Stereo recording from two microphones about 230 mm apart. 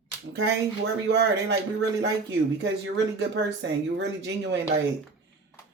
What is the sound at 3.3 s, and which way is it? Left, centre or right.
Speech, right.